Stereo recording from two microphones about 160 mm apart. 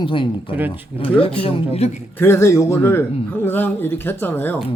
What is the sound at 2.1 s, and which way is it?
A man's voice, 15° left (ahead or behind).